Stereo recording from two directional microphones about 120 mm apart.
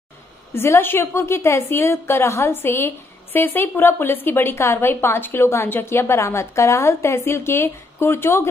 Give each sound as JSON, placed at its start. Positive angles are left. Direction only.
{"t": 0.6, "sound": "a woman's voice", "side_deg": 20}